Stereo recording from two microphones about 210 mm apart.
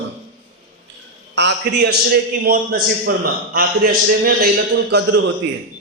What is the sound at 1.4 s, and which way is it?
A man's voice, 55° right (ahead or behind).